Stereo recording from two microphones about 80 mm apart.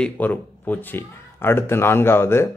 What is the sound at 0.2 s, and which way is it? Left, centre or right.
Speech, left.